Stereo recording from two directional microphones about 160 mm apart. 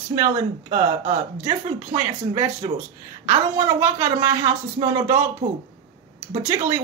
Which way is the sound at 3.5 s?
15° right (ahead or behind).